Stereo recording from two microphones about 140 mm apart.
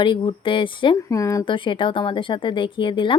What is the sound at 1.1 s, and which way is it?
Speech, 20° left (ahead or behind).